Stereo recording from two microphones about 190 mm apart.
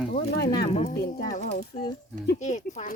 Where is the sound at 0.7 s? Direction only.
30° left (ahead or behind).